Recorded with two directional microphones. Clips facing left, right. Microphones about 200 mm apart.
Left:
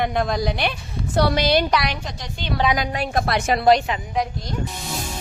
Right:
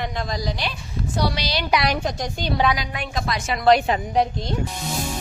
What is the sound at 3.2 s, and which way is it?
Speech, 55° left (ahead or behind).